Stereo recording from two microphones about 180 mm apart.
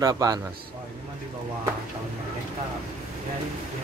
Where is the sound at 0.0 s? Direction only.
20° right (ahead or behind).